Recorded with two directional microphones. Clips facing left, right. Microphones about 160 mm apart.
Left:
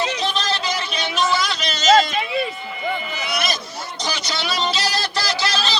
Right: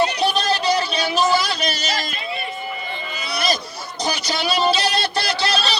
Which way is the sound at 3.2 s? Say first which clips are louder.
Right 3 dB; 30° right (ahead or behind).